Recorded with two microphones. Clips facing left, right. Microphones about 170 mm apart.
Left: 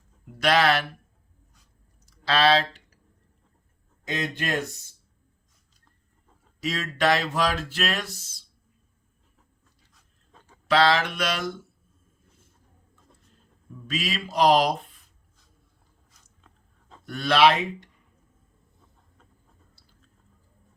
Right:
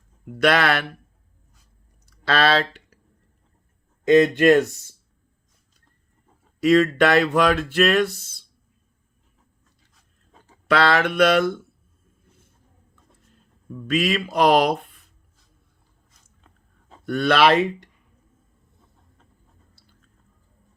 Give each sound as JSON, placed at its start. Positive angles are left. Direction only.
{"t": 0.3, "sound": "speech", "side_deg": -60}
{"t": 2.0, "sound": "speech", "side_deg": -60}
{"t": 4.0, "sound": "speech", "side_deg": -60}
{"t": 6.6, "sound": "speech", "side_deg": -55}
{"t": 10.7, "sound": "speech", "side_deg": -60}
{"t": 13.8, "sound": "speech", "side_deg": -60}
{"t": 17.1, "sound": "speech", "side_deg": -60}